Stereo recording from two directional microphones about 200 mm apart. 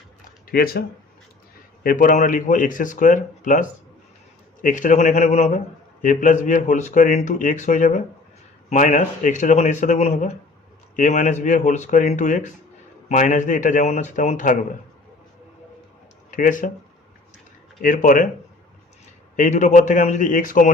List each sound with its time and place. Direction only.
0.4 s a man's voice: 50° left (ahead or behind)
16.3 s a man's voice: 40° left (ahead or behind)
17.8 s speech: 45° left (ahead or behind)
19.4 s a man's voice: 35° left (ahead or behind)